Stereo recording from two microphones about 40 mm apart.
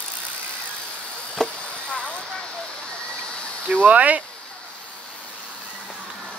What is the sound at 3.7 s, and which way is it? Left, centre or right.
Speech, right.